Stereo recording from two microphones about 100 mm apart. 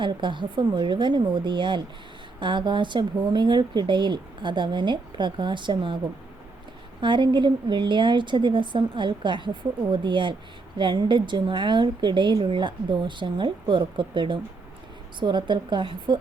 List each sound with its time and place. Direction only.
0.0 s a woman's voice: 55° right (ahead or behind)
7.0 s a woman's voice: 50° right (ahead or behind)